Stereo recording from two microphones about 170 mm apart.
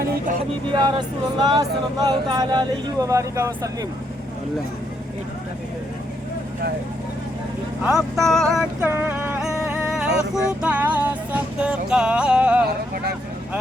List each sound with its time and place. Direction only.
0.7 s speech: 25° right (ahead or behind)
7.9 s speech: centre (ahead or behind)
8.8 s a sound: 10° right (ahead or behind)